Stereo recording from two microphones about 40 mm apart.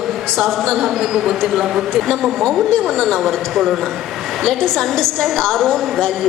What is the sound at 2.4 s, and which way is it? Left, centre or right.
A woman's voice, centre.